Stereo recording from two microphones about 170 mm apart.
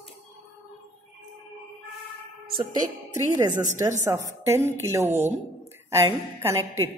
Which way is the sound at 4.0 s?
15° right (ahead or behind).